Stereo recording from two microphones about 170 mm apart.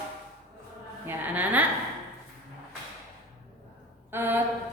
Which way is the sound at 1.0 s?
10° right (ahead or behind).